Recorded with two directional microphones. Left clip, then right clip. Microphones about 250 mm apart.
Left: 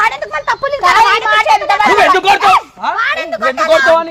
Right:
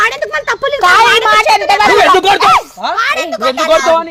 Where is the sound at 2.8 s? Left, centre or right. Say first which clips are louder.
Right 1 dB; right.